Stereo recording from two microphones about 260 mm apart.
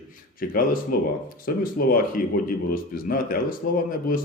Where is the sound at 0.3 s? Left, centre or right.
Left.